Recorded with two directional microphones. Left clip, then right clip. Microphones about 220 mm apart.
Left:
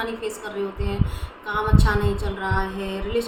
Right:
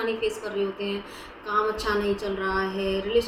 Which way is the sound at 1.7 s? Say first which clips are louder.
Left 2 dB; 15° left (ahead or behind).